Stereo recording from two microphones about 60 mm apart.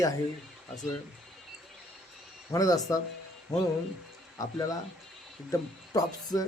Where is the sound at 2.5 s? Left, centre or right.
Left.